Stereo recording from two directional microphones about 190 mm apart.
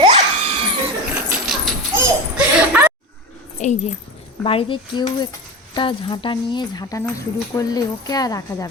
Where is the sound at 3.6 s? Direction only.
35° left (ahead or behind).